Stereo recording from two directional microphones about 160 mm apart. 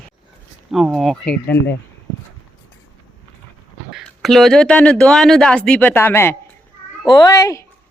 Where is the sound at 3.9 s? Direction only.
Centre (ahead or behind); by 7.7 s 20° left (ahead or behind).